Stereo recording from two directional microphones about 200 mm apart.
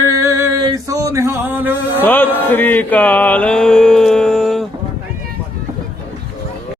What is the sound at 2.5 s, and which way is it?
Music, 10° left (ahead or behind).